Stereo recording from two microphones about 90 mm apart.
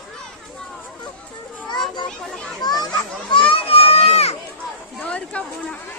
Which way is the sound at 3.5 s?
90° left.